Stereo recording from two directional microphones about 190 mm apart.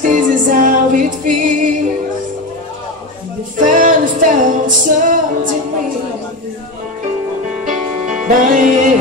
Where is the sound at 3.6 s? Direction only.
45° right (ahead or behind).